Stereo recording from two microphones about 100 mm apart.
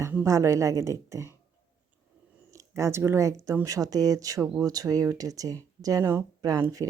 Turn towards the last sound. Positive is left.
turn(degrees=-40)  # may be behind; listen again after turning